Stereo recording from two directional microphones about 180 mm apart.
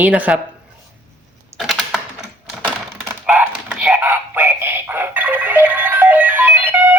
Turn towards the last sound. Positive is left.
turn(degrees=-10)  # may be behind; listen again after turning